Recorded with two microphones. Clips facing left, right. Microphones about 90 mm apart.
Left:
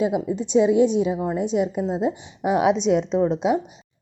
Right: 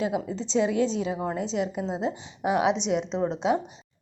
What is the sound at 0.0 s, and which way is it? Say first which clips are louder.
A woman's voice: left 5 dB; 20° left (ahead or behind).